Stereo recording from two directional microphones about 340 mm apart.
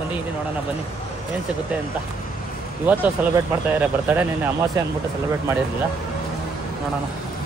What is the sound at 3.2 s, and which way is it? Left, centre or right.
Speech, centre.